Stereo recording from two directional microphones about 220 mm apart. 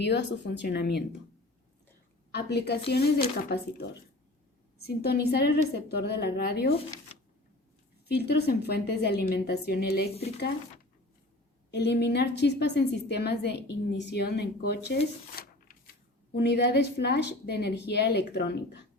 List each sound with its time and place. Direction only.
0.0 s a woman's voice: 50° left (ahead or behind)
2.3 s a woman's voice: 50° left (ahead or behind)
8.0 s a woman's voice: 45° left (ahead or behind)
11.7 s a woman's voice: 50° left (ahead or behind)
15.4 s a sound: 45° left (ahead or behind)
16.3 s a woman's voice: 45° left (ahead or behind)